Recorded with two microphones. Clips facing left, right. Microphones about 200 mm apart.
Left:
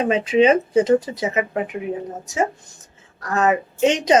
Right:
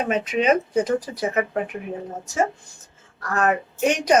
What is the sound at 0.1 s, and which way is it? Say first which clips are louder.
A woman's voice: left 5 dB; 30° left (ahead or behind).